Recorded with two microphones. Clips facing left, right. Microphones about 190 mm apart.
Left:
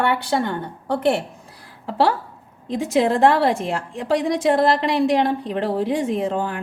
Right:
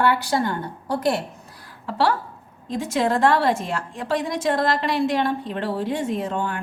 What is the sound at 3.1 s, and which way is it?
A woman's voice, 30° left (ahead or behind).